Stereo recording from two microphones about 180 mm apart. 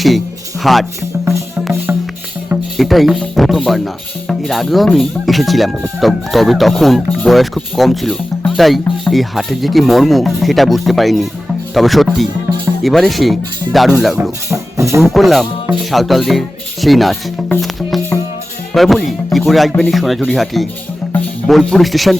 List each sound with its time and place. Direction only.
0.6 s speech: centre (ahead or behind)
2.5 s speech: centre (ahead or behind)
14.5 s music: 15° right (ahead or behind)
15.0 s speech: centre (ahead or behind)
18.7 s speech: centre (ahead or behind)